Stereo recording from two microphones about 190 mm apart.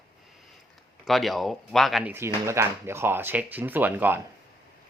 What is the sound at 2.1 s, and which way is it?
Speech, 15° right (ahead or behind).